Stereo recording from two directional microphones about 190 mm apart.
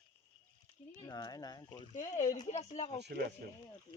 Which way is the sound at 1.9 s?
40° left (ahead or behind).